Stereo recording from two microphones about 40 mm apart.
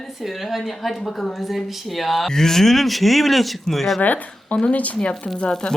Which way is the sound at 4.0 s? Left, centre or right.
Left.